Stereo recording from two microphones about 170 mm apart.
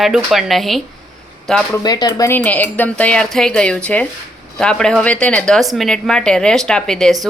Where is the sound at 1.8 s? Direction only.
20° left (ahead or behind).